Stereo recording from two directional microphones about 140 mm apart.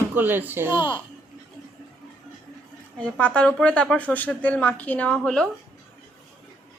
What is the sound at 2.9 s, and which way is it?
A woman's voice, 10° left (ahead or behind).